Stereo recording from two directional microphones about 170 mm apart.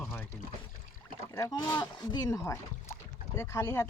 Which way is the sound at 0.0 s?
10° left (ahead or behind).